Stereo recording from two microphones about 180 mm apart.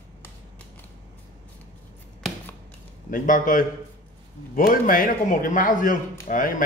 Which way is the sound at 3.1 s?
50° left (ahead or behind).